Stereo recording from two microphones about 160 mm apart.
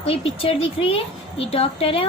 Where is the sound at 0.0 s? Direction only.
35° left (ahead or behind).